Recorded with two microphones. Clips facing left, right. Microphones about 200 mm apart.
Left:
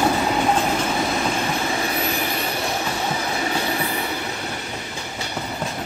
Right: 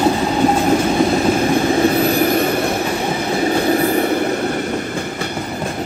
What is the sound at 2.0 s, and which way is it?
Train, 50° right (ahead or behind).